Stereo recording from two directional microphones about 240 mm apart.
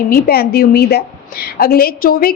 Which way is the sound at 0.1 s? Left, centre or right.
Left.